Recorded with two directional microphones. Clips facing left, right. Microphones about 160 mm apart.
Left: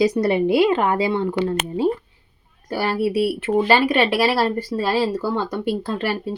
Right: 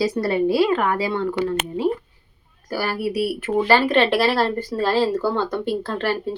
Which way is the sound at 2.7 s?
25° left (ahead or behind).